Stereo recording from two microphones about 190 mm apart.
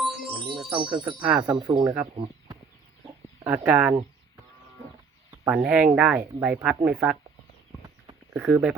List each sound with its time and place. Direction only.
0.0 s music: centre (ahead or behind)
0.8 s speech: 25° right (ahead or behind)
1.0 s speech: 5° right (ahead or behind)
1.4 s speech: 20° right (ahead or behind)
3.4 s speech: 5° right (ahead or behind)
5.5 s speech: 5° right (ahead or behind)
8.4 s speech: 5° right (ahead or behind)